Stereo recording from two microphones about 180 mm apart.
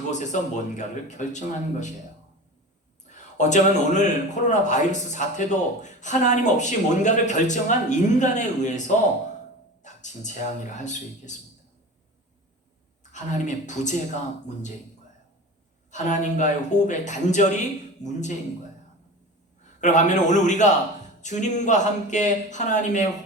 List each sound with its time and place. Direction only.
0.1 s a man's voice: 40° left (ahead or behind)
3.1 s a man's voice: 40° left (ahead or behind)
13.0 s speech: 40° left (ahead or behind)
15.9 s a man's voice: 40° left (ahead or behind)
19.8 s a man's voice: 40° left (ahead or behind)